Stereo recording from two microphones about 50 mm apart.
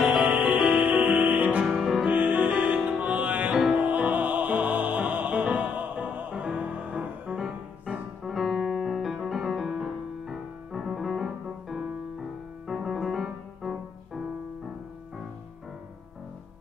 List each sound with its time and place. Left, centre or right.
0.5 s music: right
1.7 s music: centre
2.0 s music: right
7.3 s music: centre
8.2 s music: centre